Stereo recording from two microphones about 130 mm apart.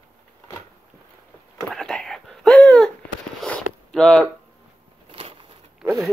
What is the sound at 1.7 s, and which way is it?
Whispering, 5° left (ahead or behind).